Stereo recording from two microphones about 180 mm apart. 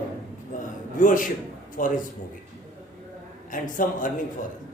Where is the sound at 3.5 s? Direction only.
45° left (ahead or behind).